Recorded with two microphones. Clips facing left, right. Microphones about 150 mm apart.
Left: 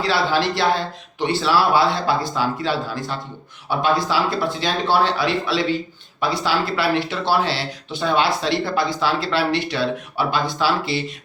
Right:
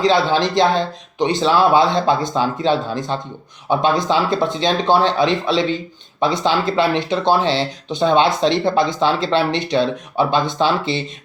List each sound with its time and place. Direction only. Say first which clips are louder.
0.0 s speech: right 4 dB; 20° right (ahead or behind)